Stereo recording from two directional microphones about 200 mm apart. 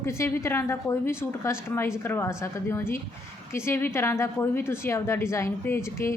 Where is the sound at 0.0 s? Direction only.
15° left (ahead or behind).